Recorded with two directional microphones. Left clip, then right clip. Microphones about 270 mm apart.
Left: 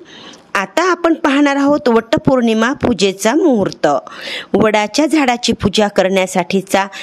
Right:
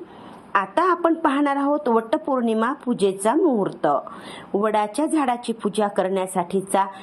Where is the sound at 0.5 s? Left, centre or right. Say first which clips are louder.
Left 5 dB; left.